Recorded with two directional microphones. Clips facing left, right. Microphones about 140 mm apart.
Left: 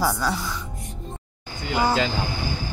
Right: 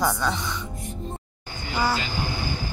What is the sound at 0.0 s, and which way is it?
Speech, 5° left (ahead or behind).